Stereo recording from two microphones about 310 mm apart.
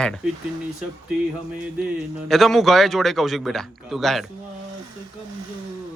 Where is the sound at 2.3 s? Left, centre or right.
Centre.